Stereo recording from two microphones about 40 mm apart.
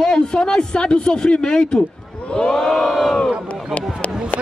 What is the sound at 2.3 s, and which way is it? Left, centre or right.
Crowd, centre.